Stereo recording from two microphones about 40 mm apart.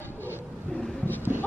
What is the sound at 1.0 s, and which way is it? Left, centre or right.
Vehicle, left.